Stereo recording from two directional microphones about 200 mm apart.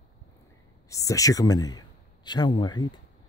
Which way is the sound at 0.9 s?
15° left (ahead or behind).